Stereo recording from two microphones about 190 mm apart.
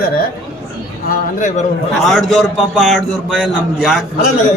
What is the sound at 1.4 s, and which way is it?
Speech, 40° left (ahead or behind).